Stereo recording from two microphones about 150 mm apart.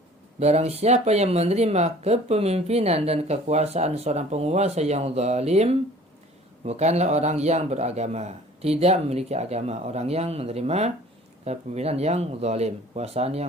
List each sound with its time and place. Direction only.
0.3 s speech: 45° right (ahead or behind)